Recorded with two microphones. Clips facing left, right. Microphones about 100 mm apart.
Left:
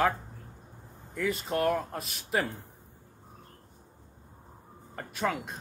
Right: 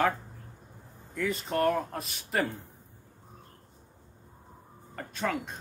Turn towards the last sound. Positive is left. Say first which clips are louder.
# left 1 dB
turn(degrees=5)  # may be behind; listen again after turning